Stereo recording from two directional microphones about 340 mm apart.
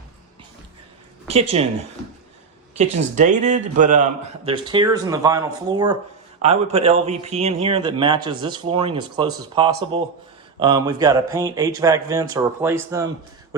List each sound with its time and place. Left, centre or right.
1.3 s speech: centre
3.2 s speech: right